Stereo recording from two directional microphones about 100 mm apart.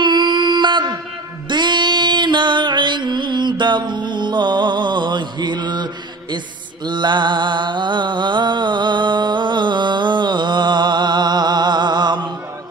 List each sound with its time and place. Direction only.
0.0 s music: 50° right (ahead or behind)
6.9 s music: 50° right (ahead or behind)